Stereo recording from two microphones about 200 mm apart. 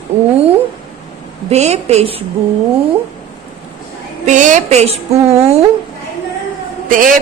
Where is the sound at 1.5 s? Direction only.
35° right (ahead or behind).